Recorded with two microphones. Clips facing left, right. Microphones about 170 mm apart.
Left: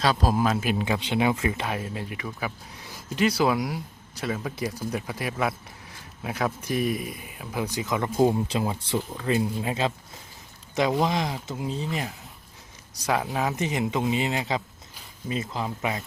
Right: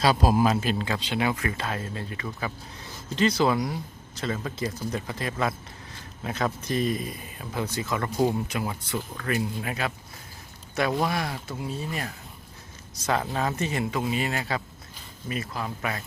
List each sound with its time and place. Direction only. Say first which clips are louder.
0.0 s a man's voice: right 2 dB; 10° right (ahead or behind)
0.6 s speech: left 2 dB; 15° left (ahead or behind)